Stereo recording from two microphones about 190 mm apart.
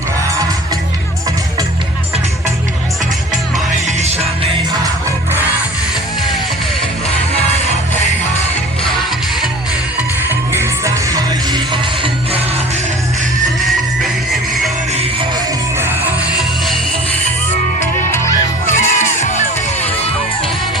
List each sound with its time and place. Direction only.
3.8 s music: 35° right (ahead or behind)
10.5 s music: 15° right (ahead or behind)
15.8 s music: 10° right (ahead or behind)
18.8 s crowd: 40° left (ahead or behind)